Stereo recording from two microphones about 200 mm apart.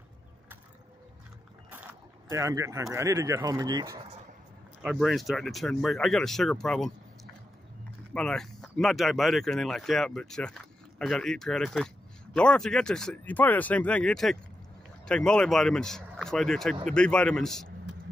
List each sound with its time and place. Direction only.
2.3 s speech: 15° right (ahead or behind)
4.8 s speech: centre (ahead or behind)
8.1 s speech: 5° left (ahead or behind)